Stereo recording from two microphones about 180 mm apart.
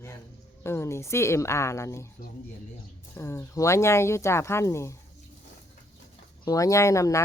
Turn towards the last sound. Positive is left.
turn(degrees=15)  # may be behind; listen again after turning